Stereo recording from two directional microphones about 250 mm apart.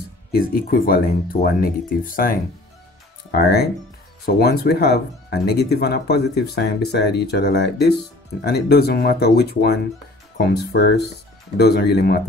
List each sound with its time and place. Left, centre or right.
0.3 s speech: left